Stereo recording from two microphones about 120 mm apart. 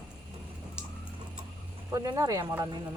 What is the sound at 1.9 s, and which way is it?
Speech, 30° right (ahead or behind).